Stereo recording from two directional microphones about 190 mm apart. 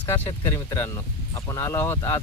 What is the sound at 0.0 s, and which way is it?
Speech, 10° left (ahead or behind).